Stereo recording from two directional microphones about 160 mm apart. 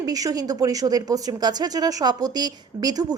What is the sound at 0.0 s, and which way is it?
A woman's voice, 20° right (ahead or behind).